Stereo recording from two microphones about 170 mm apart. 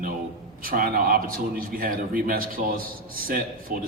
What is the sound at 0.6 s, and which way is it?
A man's voice, 60° right (ahead or behind).